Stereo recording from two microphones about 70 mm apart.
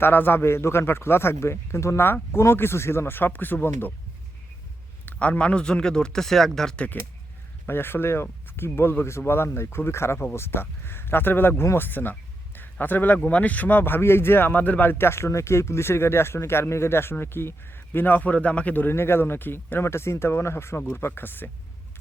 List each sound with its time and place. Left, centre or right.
0.0 s speech: left
5.0 s speech: centre
6.7 s speech: centre
7.7 s speech: left